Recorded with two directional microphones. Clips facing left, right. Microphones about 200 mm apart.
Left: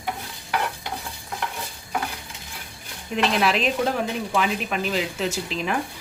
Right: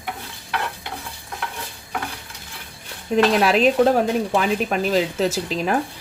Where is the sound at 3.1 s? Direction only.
40° right (ahead or behind).